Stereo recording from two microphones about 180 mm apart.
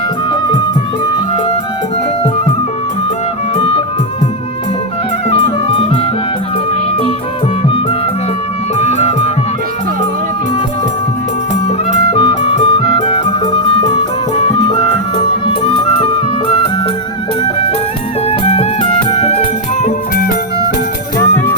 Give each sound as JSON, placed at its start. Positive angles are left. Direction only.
{"t": 3.5, "sound": "music", "side_deg": 35}
{"t": 5.3, "sound": "music", "side_deg": 30}
{"t": 8.8, "sound": "music", "side_deg": 35}
{"t": 12.1, "sound": "music", "side_deg": 30}
{"t": 18.3, "sound": "music", "side_deg": 35}
{"t": 21.2, "sound": "music", "side_deg": 15}